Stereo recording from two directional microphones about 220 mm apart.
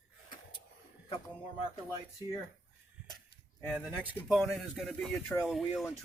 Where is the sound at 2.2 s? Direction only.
15° right (ahead or behind).